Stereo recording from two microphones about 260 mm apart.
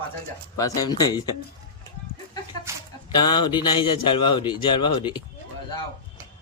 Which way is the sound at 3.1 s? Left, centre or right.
Centre.